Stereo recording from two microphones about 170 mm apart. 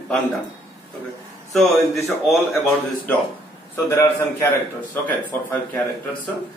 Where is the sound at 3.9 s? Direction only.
15° left (ahead or behind).